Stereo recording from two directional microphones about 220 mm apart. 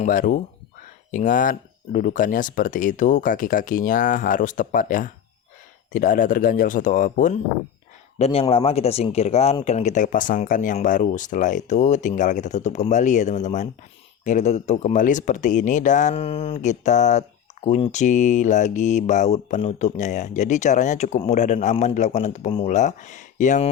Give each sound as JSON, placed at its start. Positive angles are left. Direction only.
{"t": 0.0, "sound": "speech", "side_deg": 40}
{"t": 8.2, "sound": "speech", "side_deg": 25}